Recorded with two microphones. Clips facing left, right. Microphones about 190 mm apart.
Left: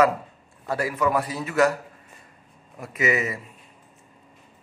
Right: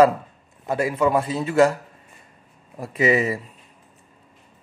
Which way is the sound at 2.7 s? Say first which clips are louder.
Right 5 dB; 30° right (ahead or behind).